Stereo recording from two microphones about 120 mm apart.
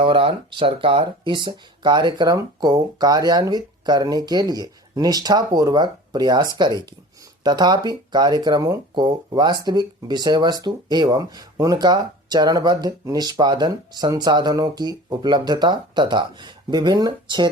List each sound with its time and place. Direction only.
0.0 s speech: 50° right (ahead or behind)